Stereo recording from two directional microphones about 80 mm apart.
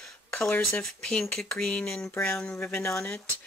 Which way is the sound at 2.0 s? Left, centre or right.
Left.